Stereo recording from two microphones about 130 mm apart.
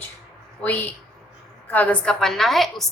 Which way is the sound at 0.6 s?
10° left (ahead or behind).